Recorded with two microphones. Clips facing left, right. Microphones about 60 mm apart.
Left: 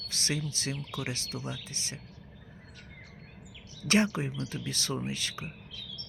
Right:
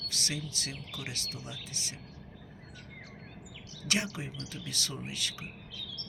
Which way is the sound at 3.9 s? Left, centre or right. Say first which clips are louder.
Left 7 dB; left.